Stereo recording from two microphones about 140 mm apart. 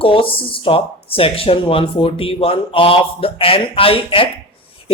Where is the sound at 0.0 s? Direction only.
40° left (ahead or behind).